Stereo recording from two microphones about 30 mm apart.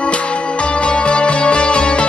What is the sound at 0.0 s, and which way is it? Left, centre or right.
Music, left.